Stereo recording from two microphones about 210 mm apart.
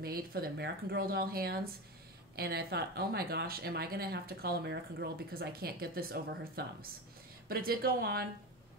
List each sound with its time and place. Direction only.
0.0 s speech: 45° right (ahead or behind)